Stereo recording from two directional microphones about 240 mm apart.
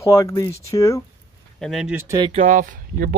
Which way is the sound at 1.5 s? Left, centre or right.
Centre.